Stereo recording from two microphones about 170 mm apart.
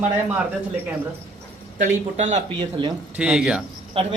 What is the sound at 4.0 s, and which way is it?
Speech, 30° right (ahead or behind).